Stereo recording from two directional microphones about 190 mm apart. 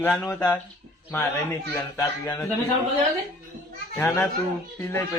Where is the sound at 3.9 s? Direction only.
10° left (ahead or behind).